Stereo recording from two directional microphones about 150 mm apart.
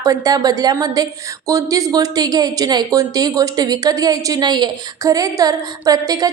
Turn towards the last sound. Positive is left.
turn(degrees=-25)  # may be behind; listen again after turning